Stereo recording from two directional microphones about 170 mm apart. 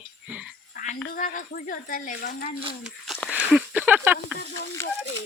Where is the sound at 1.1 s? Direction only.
50° left (ahead or behind).